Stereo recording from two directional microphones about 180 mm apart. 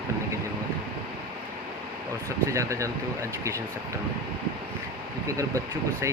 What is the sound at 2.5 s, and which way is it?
Speech, 15° right (ahead or behind).